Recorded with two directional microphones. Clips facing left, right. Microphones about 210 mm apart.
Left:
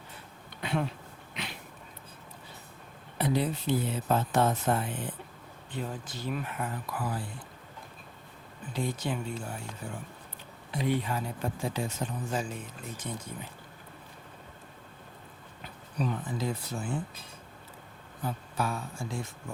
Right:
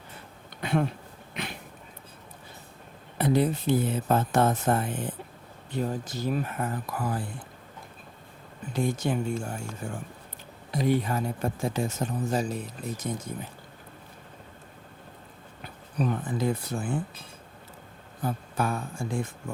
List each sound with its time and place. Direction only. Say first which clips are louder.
0.6 s a sound: right 5 dB; 50° right (ahead or behind)
3.2 s speech: right 5 dB; 50° right (ahead or behind)
8.7 s speech: right 5 dB; 45° right (ahead or behind)
16.0 s speech: right 4 dB; 55° right (ahead or behind)
18.2 s speech: right 4 dB; 50° right (ahead or behind)